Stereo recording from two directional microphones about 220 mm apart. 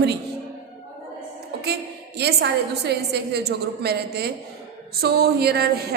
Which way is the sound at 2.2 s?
50° right (ahead or behind).